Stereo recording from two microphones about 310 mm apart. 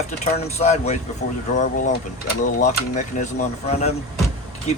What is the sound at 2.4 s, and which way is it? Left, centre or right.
Speech, left.